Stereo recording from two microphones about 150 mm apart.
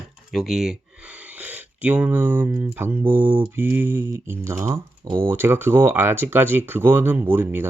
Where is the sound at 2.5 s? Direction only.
15° right (ahead or behind).